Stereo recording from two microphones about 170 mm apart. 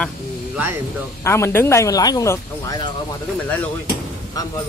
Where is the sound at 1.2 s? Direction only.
15° left (ahead or behind).